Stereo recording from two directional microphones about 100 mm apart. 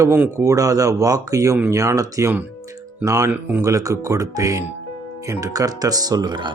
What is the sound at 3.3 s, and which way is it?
Speech, 20° right (ahead or behind).